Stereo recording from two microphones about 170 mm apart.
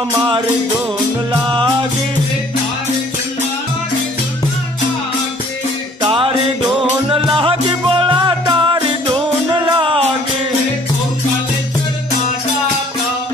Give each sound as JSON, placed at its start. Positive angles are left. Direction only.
{"t": 1.3, "sound": "music", "side_deg": -25}
{"t": 6.0, "sound": "music", "side_deg": -30}
{"t": 7.3, "sound": "music", "side_deg": -30}